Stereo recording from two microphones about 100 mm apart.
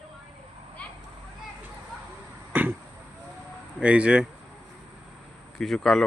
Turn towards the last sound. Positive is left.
turn(degrees=5)  # may be behind; listen again after turning